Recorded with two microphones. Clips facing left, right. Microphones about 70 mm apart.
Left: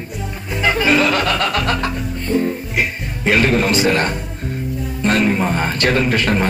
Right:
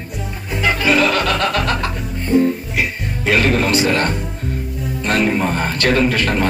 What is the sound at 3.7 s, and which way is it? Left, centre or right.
Speech, left.